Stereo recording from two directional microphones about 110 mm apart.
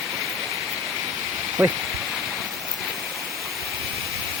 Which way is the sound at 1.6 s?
15° right (ahead or behind).